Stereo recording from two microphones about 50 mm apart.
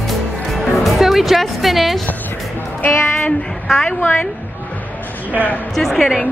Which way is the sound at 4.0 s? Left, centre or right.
Left.